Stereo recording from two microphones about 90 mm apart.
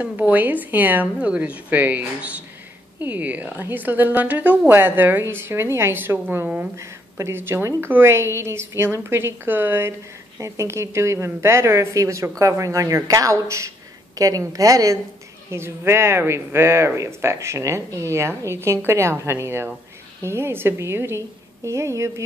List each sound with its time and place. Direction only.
0.0 s a woman's voice: 20° right (ahead or behind)
6.8 s a woman's voice: 30° right (ahead or behind)
15.5 s a woman's voice: 30° right (ahead or behind)